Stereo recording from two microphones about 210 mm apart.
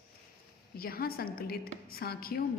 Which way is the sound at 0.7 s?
45° left (ahead or behind).